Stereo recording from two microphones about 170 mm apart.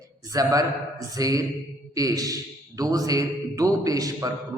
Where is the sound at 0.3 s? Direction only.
20° right (ahead or behind).